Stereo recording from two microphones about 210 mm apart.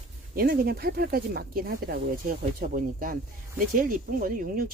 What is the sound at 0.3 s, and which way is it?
Speech, 45° right (ahead or behind).